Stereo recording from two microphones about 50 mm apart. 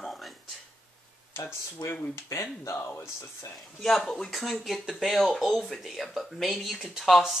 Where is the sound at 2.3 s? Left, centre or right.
Left.